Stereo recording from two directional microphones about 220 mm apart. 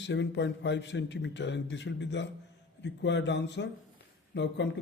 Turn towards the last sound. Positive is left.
turn(degrees=55)  # may be behind; listen again after turning